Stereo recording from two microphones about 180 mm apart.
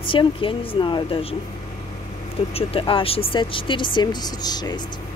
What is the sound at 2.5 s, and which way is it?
Speech, 30° left (ahead or behind).